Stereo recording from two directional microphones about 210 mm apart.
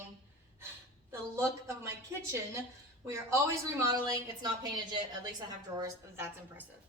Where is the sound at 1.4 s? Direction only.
15° right (ahead or behind).